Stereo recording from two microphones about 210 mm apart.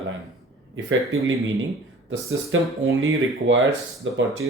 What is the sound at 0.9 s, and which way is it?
Speech, 65° right (ahead or behind).